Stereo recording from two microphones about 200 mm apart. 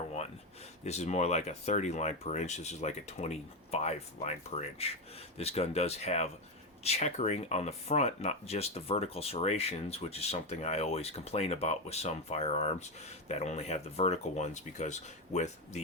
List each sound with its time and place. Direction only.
0.9 s speech: 35° left (ahead or behind)